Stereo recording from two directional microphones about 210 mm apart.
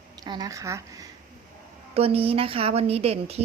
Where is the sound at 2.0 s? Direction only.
30° right (ahead or behind).